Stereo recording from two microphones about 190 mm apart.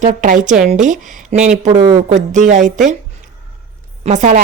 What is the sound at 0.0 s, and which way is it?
Speech, 40° right (ahead or behind).